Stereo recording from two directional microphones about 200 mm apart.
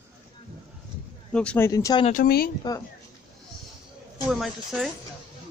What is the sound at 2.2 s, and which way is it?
Speech, 50° left (ahead or behind).